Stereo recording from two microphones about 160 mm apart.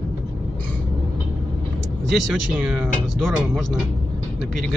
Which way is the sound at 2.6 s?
5° right (ahead or behind).